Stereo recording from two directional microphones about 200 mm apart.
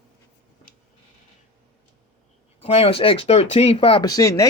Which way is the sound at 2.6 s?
30° left (ahead or behind).